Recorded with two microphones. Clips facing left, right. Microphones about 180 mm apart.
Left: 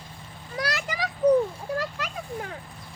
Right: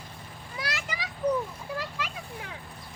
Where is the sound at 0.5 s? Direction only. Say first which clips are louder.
Left 6 dB; 40° left (ahead or behind).